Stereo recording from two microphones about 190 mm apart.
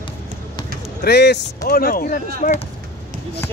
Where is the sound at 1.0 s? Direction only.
60° left (ahead or behind).